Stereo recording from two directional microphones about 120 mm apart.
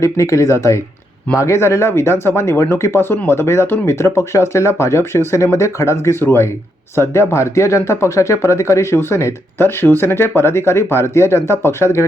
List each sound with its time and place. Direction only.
0.0 s speech: 25° left (ahead or behind)